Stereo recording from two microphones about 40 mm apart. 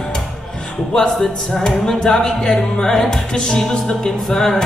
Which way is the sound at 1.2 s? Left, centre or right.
Centre.